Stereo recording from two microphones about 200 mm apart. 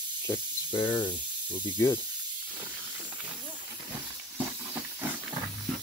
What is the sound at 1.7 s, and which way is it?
Speech, 10° left (ahead or behind).